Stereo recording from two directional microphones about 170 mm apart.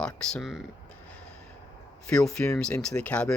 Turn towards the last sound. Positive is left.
turn(degrees=5)  # may be behind; listen again after turning